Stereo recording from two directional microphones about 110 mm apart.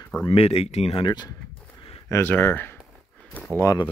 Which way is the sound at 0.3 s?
65° left (ahead or behind).